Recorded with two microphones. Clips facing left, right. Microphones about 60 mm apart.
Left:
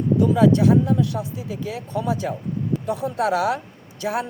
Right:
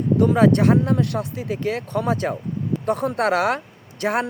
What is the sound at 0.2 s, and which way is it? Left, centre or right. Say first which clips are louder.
Speech: right 1 dB; right.